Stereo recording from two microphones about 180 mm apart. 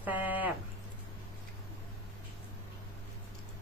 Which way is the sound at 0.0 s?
10° right (ahead or behind).